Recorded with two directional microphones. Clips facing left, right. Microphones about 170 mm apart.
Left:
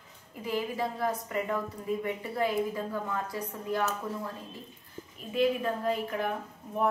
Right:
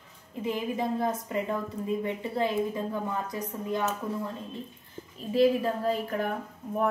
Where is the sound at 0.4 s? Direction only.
20° right (ahead or behind).